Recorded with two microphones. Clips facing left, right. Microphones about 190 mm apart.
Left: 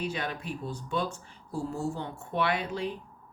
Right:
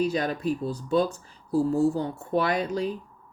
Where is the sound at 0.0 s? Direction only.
40° right (ahead or behind).